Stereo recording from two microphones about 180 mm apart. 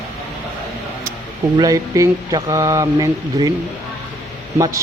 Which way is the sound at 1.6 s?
20° right (ahead or behind).